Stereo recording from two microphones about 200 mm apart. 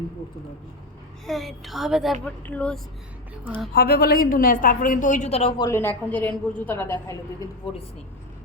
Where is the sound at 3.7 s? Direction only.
50° left (ahead or behind); by 5.5 s 35° left (ahead or behind).